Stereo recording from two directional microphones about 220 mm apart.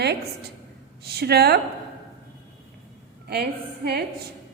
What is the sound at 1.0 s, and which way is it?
Speech, 45° right (ahead or behind).